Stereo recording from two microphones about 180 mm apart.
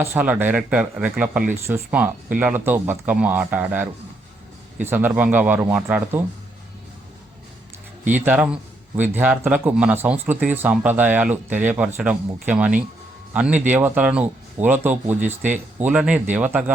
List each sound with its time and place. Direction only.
0.0 s speech: 10° right (ahead or behind)
4.9 s speech: 10° right (ahead or behind)
8.2 s speech: 10° right (ahead or behind)
15.2 s speech: 45° right (ahead or behind)
15.5 s speech: 10° right (ahead or behind)